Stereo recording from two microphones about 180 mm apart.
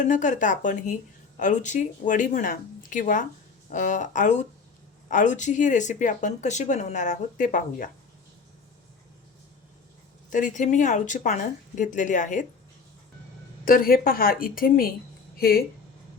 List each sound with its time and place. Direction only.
0.0 s speech: 45° left (ahead or behind)
10.2 s speech: 45° left (ahead or behind)
13.7 s speech: 55° left (ahead or behind)